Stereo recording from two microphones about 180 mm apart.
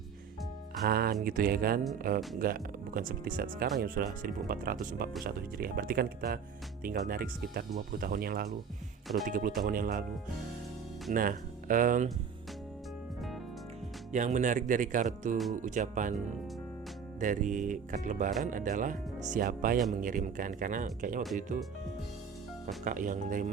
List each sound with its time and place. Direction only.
0.9 s speech: 60° right (ahead or behind)
11.1 s speech: 50° right (ahead or behind)
14.1 s speech: 40° right (ahead or behind)
17.2 s speech: 45° right (ahead or behind)
22.8 s speech: 45° right (ahead or behind)